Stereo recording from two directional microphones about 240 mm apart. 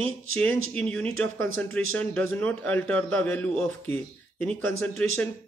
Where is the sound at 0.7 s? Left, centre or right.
Centre.